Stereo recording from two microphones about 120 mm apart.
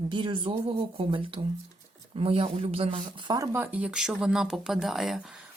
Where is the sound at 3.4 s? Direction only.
20° right (ahead or behind); by 5.2 s centre (ahead or behind).